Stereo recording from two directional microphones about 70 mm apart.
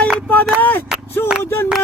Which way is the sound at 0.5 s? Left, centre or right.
Left.